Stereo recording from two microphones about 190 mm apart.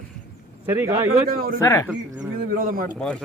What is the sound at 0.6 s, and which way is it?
Speech, 15° right (ahead or behind).